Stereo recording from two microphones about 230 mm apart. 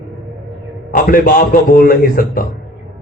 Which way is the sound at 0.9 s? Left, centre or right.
Left.